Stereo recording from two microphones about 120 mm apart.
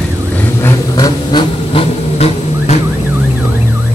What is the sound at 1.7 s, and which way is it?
Vehicle, 55° left (ahead or behind).